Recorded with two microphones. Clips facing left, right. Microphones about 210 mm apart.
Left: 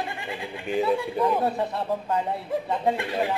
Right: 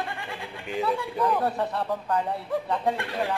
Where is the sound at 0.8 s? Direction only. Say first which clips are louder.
Left 2 dB; 25° left (ahead or behind).